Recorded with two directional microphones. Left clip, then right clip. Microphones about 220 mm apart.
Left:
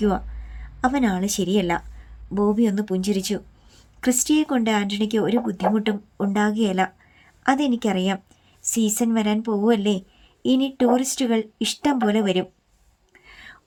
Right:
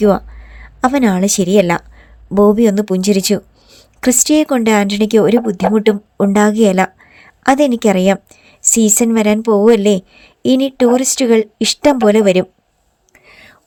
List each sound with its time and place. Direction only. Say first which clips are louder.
0.0 s speech: right 11 dB; 35° right (ahead or behind)
13.1 s whispering: right 3 dB; 20° right (ahead or behind)